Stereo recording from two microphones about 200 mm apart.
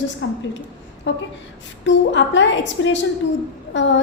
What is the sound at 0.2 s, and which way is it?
A woman's voice, 60° left (ahead or behind).